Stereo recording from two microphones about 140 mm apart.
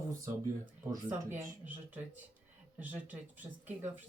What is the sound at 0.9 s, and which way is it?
Speech, 20° right (ahead or behind).